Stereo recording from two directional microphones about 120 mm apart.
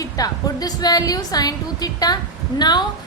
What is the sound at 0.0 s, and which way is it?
A woman's voice, 30° left (ahead or behind).